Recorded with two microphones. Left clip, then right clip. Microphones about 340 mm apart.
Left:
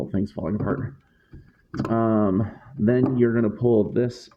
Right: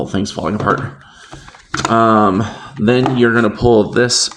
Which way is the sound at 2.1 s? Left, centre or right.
Left.